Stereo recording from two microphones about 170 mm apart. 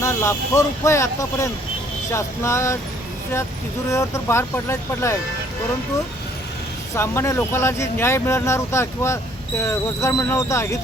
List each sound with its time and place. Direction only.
0.0 s speech: 15° left (ahead or behind)
3.8 s speech: 15° left (ahead or behind)
6.9 s speech: 15° left (ahead or behind)